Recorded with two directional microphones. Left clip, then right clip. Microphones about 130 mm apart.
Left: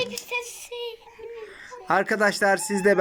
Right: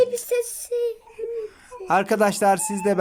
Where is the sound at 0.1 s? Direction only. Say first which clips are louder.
Right 7 dB; 60° right (ahead or behind).